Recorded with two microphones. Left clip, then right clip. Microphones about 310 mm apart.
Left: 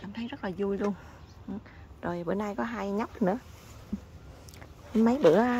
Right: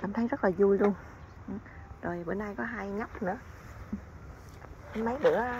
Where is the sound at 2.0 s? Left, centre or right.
Left.